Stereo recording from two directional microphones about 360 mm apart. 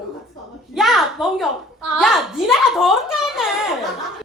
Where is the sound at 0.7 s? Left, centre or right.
Centre.